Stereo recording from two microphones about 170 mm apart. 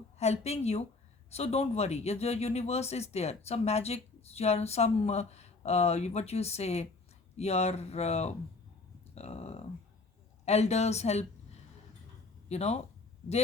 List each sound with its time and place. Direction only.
0.2 s speech: 40° left (ahead or behind)
12.5 s speech: 40° left (ahead or behind)